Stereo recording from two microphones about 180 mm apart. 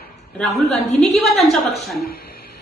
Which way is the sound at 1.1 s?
Centre (ahead or behind).